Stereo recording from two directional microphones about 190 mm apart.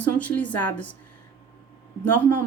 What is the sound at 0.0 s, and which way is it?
Speech, 10° left (ahead or behind).